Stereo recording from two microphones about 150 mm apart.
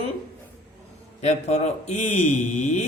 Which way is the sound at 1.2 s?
45° left (ahead or behind).